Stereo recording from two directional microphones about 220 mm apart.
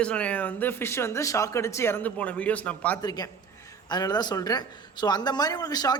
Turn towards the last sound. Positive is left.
turn(degrees=15)  # may be behind; listen again after turning